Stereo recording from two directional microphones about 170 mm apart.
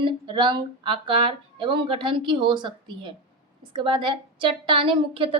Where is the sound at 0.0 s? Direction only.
30° right (ahead or behind).